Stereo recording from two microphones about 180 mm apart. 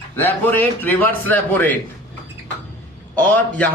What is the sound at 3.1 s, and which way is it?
Speech, 10° left (ahead or behind).